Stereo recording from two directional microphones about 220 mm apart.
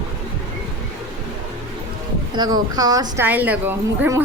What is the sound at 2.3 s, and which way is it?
A woman's voice, 20° right (ahead or behind).